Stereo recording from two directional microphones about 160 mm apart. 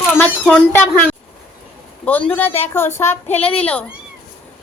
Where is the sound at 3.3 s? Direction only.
35° left (ahead or behind).